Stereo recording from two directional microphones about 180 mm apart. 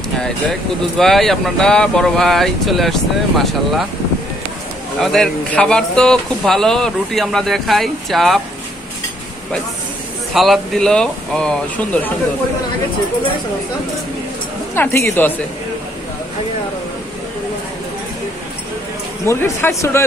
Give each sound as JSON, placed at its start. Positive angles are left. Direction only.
{"t": 0.2, "sound": "speech", "side_deg": 0}
{"t": 5.0, "sound": "speech", "side_deg": 5}
{"t": 10.3, "sound": "speech", "side_deg": 0}
{"t": 14.7, "sound": "speech", "side_deg": 15}
{"t": 19.2, "sound": "speech", "side_deg": 15}